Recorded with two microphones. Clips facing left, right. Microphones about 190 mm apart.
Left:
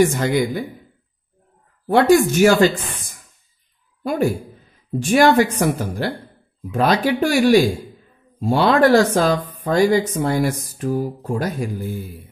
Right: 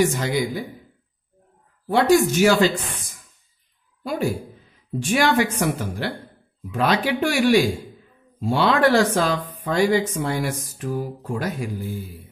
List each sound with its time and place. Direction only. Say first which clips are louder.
0.0 s speech: left 4 dB; 55° left (ahead or behind)
1.9 s speech: left 3 dB; 55° left (ahead or behind)
4.0 s speech: left 4 dB; 50° left (ahead or behind)